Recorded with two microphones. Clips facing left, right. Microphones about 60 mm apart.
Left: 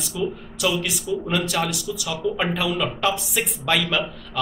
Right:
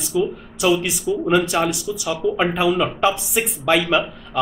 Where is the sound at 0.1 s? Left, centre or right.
Right.